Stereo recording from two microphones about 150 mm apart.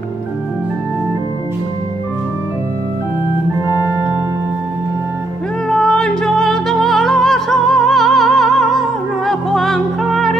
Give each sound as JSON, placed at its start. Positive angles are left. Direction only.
{"t": 5.7, "sound": "music", "side_deg": 5}